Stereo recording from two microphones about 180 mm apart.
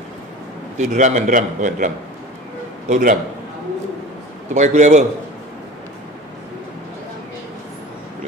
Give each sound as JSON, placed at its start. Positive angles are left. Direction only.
{"t": 0.7, "sound": "a man's voice", "side_deg": -40}
{"t": 2.9, "sound": "a man's voice", "side_deg": -45}
{"t": 4.6, "sound": "a man's voice", "side_deg": -40}